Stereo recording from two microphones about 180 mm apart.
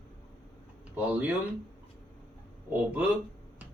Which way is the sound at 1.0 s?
10° right (ahead or behind).